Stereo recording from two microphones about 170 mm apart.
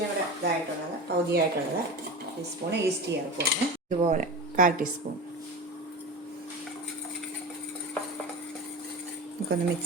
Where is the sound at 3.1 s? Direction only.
90° right.